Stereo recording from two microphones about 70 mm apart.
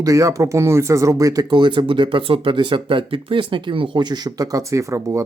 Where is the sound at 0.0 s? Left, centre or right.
Right.